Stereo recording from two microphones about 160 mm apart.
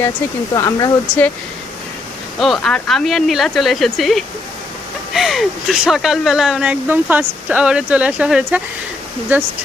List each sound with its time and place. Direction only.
0.5 s speech: 20° left (ahead or behind)
2.4 s speech: centre (ahead or behind)